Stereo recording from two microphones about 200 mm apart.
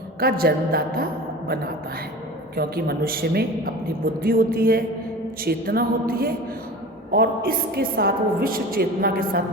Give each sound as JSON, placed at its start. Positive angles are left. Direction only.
{"t": 0.2, "sound": "a woman's voice", "side_deg": -50}
{"t": 2.6, "sound": "a woman's voice", "side_deg": -50}